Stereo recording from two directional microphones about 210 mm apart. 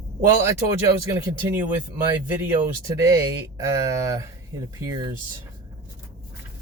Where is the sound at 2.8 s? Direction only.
15° right (ahead or behind).